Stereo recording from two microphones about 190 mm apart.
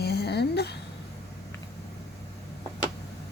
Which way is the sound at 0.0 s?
60° left (ahead or behind).